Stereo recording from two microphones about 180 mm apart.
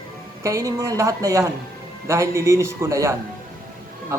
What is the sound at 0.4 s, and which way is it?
Speech, 15° right (ahead or behind).